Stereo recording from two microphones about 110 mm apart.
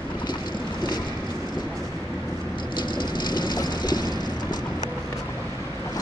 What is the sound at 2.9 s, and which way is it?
Vehicle, 45° left (ahead or behind).